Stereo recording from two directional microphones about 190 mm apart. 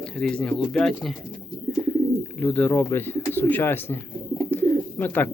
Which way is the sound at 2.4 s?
5° left (ahead or behind).